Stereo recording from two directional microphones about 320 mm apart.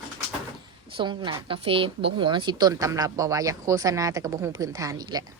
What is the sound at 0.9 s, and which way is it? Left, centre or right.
A woman's voice, centre.